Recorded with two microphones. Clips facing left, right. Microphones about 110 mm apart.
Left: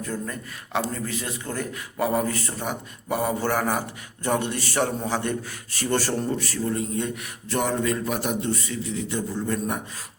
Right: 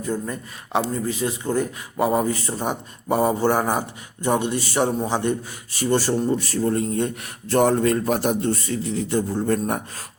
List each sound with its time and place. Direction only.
0.0 s a man's voice: 20° right (ahead or behind)
6.6 s a man's voice: 40° right (ahead or behind)